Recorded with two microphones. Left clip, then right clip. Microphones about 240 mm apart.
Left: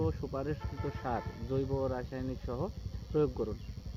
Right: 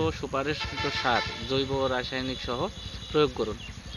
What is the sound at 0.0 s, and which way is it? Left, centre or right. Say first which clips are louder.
Speech: right 8 dB; centre.